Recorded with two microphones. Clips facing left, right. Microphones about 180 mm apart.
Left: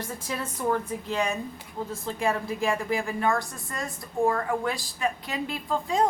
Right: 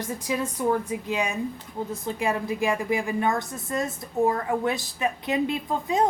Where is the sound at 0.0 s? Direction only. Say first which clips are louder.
Right 5 dB; 15° right (ahead or behind).